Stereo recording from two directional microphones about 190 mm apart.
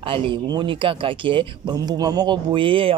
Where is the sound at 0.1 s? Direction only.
25° right (ahead or behind).